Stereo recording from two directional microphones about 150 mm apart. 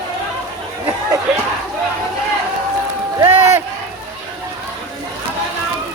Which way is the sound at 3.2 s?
15° right (ahead or behind).